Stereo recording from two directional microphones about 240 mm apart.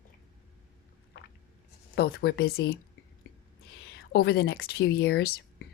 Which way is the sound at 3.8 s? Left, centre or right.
Left.